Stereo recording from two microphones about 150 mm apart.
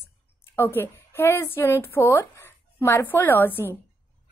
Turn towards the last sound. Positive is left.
turn(degrees=15)  # may be behind; listen again after turning